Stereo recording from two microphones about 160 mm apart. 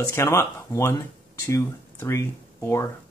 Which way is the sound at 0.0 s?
15° left (ahead or behind).